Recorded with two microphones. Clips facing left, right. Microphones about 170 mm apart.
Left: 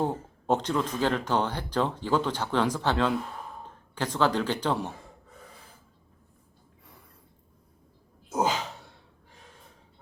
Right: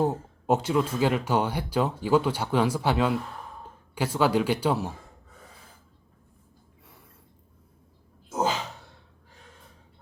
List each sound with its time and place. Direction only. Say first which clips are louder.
0.0 s speech: right 3 dB; 10° right (ahead or behind)